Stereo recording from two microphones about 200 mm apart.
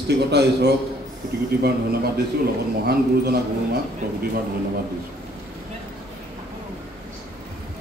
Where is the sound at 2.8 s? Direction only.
50° right (ahead or behind).